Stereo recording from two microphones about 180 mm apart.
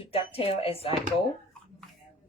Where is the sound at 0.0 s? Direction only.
30° left (ahead or behind).